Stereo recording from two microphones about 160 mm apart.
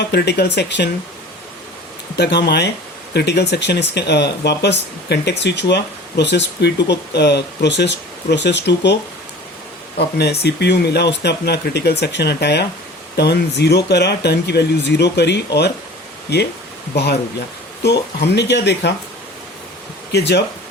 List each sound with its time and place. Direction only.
0.1 s speech: 90° left
2.1 s speech: 90° left
10.4 s speech: 90° left
20.1 s speech: 90° left